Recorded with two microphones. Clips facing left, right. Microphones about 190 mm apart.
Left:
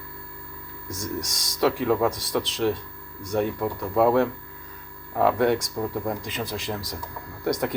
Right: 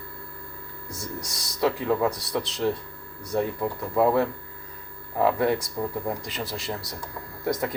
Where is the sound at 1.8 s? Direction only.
Centre (ahead or behind).